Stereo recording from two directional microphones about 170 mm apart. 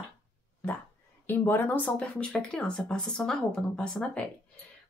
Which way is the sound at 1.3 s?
10° left (ahead or behind).